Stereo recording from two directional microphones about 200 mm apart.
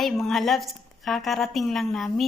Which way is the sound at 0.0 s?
Centre (ahead or behind).